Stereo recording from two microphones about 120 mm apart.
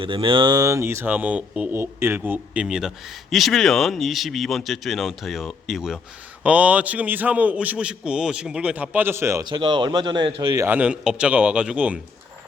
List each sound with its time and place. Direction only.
0.0 s speech: 45° right (ahead or behind); by 1.7 s 10° right (ahead or behind)
1.7 s a man's voice: 20° right (ahead or behind)
9.4 s speech: 40° right (ahead or behind)
10.5 s speech: 25° right (ahead or behind)
10.8 s a man's voice: 5° right (ahead or behind)